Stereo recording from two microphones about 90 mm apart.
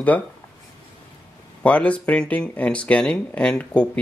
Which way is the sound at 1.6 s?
15° left (ahead or behind).